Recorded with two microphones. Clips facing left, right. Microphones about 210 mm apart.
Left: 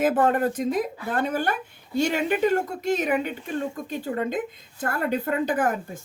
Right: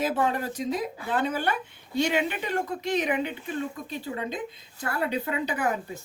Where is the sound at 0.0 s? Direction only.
50° left (ahead or behind).